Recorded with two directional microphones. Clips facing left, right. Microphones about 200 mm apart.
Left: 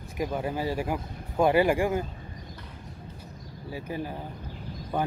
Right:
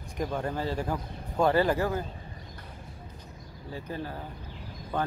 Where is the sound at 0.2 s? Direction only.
5° left (ahead or behind).